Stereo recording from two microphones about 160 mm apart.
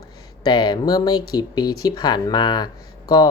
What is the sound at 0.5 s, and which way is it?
Speech, 30° left (ahead or behind).